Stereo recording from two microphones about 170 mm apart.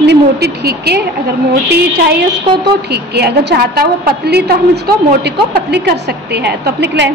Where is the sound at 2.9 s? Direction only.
75° right (ahead or behind).